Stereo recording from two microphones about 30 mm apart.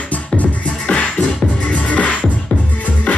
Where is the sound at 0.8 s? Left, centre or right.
Left.